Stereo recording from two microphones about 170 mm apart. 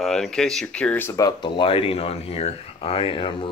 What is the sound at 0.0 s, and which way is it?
Speech, centre (ahead or behind).